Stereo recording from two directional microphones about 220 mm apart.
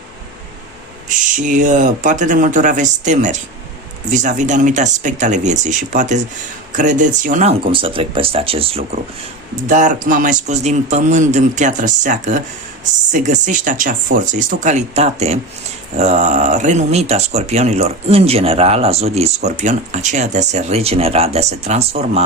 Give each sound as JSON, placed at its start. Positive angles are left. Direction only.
{"t": 1.0, "sound": "a man's voice", "side_deg": -35}